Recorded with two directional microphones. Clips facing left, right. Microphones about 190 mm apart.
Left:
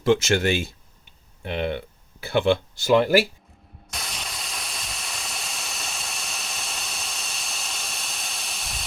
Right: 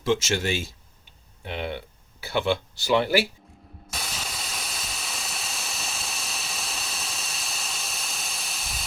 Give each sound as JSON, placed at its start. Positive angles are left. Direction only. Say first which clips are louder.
{"t": 0.0, "sound": "speech", "louder": "left 5 dB", "side_deg": 60}
{"t": 3.8, "sound": "steam", "louder": "even", "side_deg": 0}